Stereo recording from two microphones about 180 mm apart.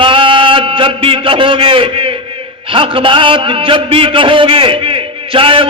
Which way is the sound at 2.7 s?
30° right (ahead or behind).